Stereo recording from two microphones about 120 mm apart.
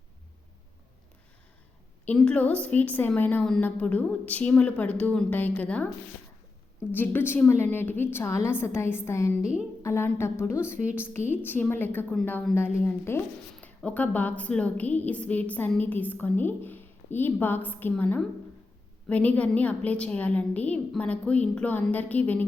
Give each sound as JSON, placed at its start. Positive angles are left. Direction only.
{"t": 2.0, "sound": "a woman's voice", "side_deg": 10}
{"t": 6.9, "sound": "a woman's voice", "side_deg": 15}
{"t": 9.4, "sound": "a woman's voice", "side_deg": -10}
{"t": 9.8, "sound": "a woman's voice", "side_deg": 20}
{"t": 10.8, "sound": "a woman's voice", "side_deg": -10}
{"t": 11.1, "sound": "a woman's voice", "side_deg": 20}